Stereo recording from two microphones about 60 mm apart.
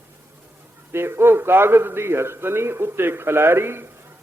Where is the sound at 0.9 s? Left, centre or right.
Right.